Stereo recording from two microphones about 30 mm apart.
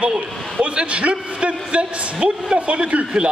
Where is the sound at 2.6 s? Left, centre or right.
Right.